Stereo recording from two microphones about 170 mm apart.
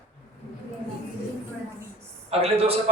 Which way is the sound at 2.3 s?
35° right (ahead or behind).